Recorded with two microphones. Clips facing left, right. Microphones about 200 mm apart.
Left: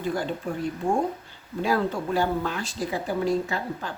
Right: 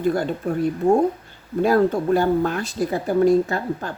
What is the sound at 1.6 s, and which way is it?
Speech, 50° right (ahead or behind).